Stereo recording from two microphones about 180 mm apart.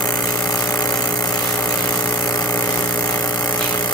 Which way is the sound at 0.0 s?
20° left (ahead or behind).